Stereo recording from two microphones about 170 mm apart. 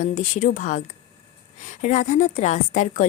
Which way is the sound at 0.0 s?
50° left (ahead or behind).